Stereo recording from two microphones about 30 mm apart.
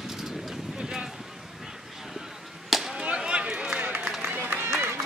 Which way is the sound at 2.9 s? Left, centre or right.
Right.